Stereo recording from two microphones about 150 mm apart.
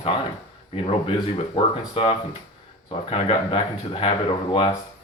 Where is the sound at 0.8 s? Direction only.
40° left (ahead or behind).